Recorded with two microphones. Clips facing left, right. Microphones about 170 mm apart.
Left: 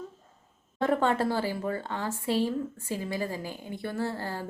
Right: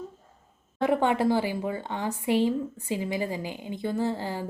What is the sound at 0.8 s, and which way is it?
A woman's voice, 15° right (ahead or behind).